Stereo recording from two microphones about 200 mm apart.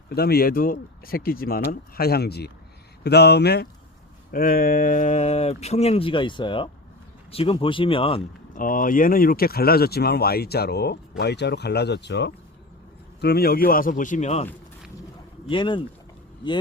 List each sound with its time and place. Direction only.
0.1 s speech: 50° left (ahead or behind); by 8.2 s 25° left (ahead or behind)
8.5 s speech: 45° left (ahead or behind)
15.4 s speech: 25° left (ahead or behind)